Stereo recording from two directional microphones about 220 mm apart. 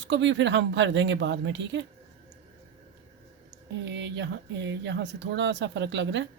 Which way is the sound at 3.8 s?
55° right (ahead or behind).